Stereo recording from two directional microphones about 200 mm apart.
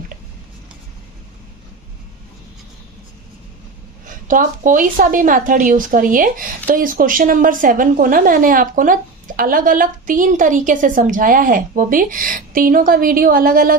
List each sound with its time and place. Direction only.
4.0 s a woman's voice: 40° right (ahead or behind)